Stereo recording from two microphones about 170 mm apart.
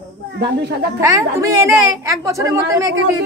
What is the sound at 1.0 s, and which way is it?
A woman's voice, 20° right (ahead or behind).